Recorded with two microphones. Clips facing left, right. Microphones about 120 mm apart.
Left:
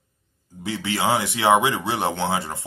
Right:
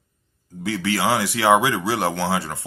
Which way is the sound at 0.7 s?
20° left (ahead or behind).